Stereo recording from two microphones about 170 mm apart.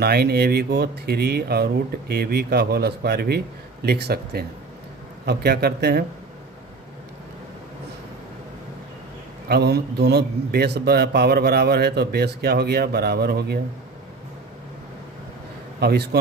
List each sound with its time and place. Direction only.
0.0 s speech: 70° right (ahead or behind)
9.5 s speech: 75° right (ahead or behind)
15.8 s speech: 70° right (ahead or behind)